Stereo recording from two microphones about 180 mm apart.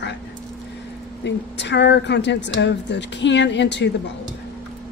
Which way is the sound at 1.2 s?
75° left (ahead or behind).